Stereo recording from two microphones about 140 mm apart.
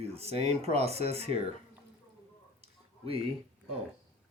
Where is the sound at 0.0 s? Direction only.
45° right (ahead or behind).